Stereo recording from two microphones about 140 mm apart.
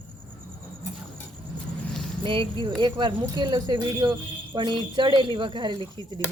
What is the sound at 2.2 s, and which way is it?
Speech, 40° right (ahead or behind).